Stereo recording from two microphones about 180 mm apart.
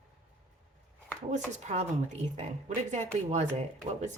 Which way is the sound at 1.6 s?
40° right (ahead or behind).